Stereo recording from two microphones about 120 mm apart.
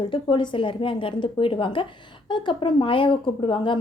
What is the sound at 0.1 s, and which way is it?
A woman's voice, 45° left (ahead or behind).